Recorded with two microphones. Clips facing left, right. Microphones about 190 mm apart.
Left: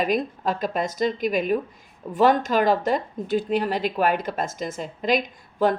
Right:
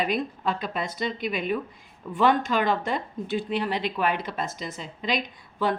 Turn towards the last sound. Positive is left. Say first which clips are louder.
# left 5 dB
turn(degrees=45)  # may be behind; listen again after turning